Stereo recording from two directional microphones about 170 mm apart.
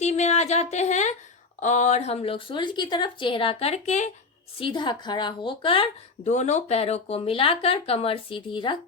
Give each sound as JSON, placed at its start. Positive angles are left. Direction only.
{"t": 0.0, "sound": "a sound", "side_deg": 40}
{"t": 1.6, "sound": "speech", "side_deg": 45}
{"t": 4.5, "sound": "speech", "side_deg": 30}